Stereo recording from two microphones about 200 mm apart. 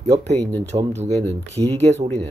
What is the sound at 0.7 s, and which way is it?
Speech, 35° right (ahead or behind).